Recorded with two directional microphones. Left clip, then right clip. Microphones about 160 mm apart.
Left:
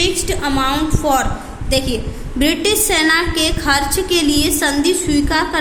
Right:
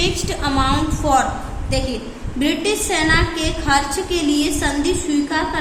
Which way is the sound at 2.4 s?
30° left (ahead or behind).